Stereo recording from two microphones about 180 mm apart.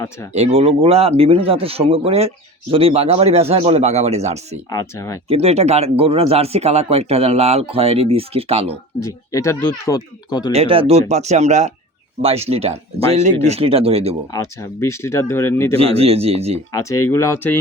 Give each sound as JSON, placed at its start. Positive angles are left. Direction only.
{"t": 0.3, "sound": "speech", "side_deg": -35}
{"t": 4.7, "sound": "speech", "side_deg": 15}
{"t": 5.3, "sound": "speech", "side_deg": -35}
{"t": 9.0, "sound": "speech", "side_deg": 15}
{"t": 10.5, "sound": "speech", "side_deg": -30}
{"t": 14.3, "sound": "speech", "side_deg": 15}
{"t": 15.8, "sound": "speech", "side_deg": -35}
{"t": 16.7, "sound": "speech", "side_deg": 15}